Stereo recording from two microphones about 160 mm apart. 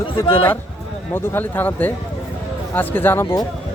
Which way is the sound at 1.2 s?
10° left (ahead or behind).